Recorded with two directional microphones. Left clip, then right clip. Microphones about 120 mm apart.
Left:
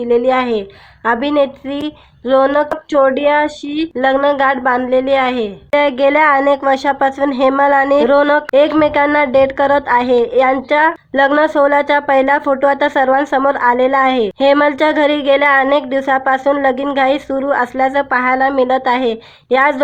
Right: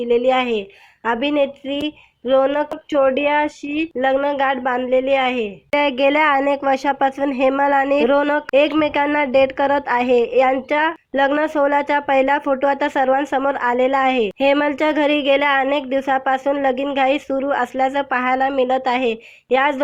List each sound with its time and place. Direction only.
0.1 s a woman's voice: 25° right (ahead or behind)
2.3 s a woman's voice: 20° right (ahead or behind)